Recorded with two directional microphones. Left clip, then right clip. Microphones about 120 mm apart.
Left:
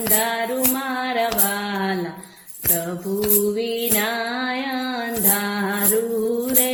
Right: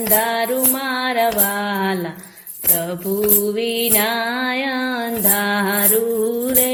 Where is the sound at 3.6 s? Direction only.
50° right (ahead or behind).